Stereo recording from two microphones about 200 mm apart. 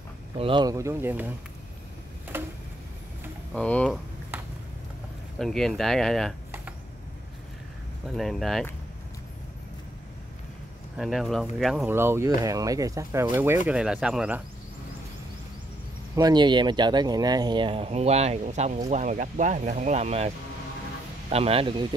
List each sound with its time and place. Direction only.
0.4 s speech: 25° right (ahead or behind)
2.3 s a sound: 10° right (ahead or behind)
3.5 s speech: 5° left (ahead or behind)
5.4 s speech: centre (ahead or behind)
8.2 s speech: centre (ahead or behind)
11.0 s speech: centre (ahead or behind)
16.2 s speech: 20° right (ahead or behind)